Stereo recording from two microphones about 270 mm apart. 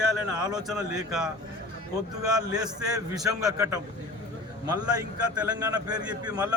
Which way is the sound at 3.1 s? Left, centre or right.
Centre.